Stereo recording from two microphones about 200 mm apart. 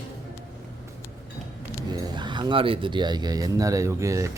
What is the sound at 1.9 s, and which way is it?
Speech, 20° right (ahead or behind).